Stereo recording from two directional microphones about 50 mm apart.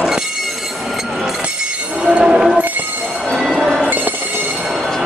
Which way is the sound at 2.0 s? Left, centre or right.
Right.